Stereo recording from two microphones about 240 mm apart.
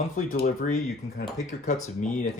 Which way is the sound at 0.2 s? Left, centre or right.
Left.